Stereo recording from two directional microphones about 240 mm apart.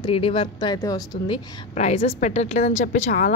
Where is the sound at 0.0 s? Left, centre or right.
Left.